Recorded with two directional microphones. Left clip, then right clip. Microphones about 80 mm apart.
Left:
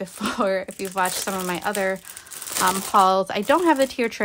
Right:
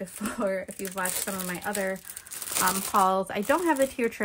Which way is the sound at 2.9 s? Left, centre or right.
Left.